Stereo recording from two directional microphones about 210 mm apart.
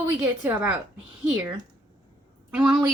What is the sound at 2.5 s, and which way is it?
Speech, 5° right (ahead or behind).